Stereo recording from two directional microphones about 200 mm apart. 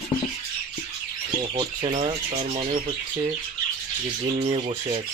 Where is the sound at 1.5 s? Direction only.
30° right (ahead or behind).